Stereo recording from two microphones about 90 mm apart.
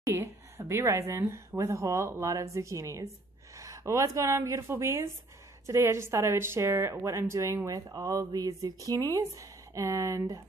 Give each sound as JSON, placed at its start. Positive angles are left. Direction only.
{"t": 0.0, "sound": "speech", "side_deg": -35}